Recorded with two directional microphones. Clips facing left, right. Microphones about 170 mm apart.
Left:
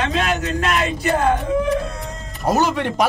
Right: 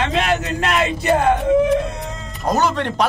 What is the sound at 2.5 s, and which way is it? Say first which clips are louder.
Speech: even; 10° left (ahead or behind).